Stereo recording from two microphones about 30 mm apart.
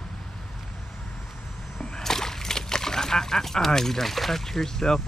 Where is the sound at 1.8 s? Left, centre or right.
Centre.